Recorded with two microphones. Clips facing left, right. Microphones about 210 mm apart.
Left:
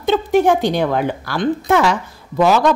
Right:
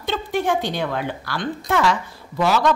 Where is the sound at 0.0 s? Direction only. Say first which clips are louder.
Left 9 dB; 45° left (ahead or behind).